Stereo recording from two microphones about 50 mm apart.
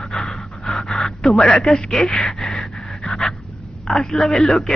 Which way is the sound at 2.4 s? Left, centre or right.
Centre.